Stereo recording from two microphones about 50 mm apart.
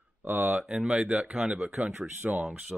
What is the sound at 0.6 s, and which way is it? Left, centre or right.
Speech, centre.